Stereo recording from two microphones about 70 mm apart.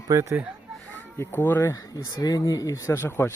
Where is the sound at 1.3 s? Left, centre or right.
Left.